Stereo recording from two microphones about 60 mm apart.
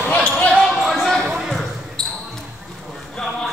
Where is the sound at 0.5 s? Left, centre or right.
Centre.